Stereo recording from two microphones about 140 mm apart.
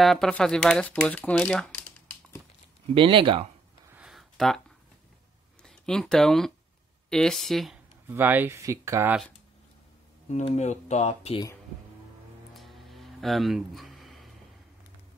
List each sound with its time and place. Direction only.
0.0 s speech: centre (ahead or behind)
2.9 s speech: 40° right (ahead or behind)
3.9 s a sound: 5° right (ahead or behind)
5.6 s speech: 5° left (ahead or behind)
8.1 s speech: 15° right (ahead or behind)
10.3 s speech: 55° left (ahead or behind)
12.5 s music: centre (ahead or behind)